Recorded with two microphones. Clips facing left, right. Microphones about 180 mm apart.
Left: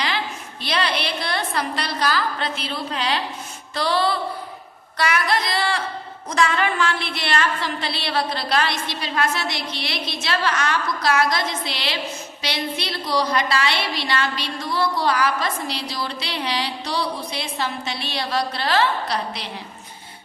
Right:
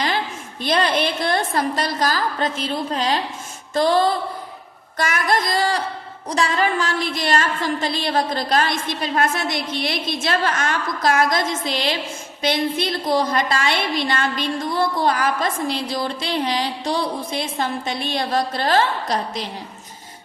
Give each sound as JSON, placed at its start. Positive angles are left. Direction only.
{"t": 0.6, "sound": "a woman's voice", "side_deg": -45}